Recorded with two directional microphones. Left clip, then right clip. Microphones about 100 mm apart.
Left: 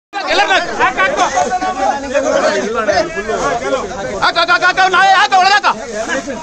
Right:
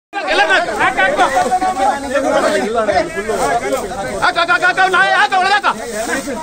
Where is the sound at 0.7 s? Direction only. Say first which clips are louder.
Even; 30° left (ahead or behind).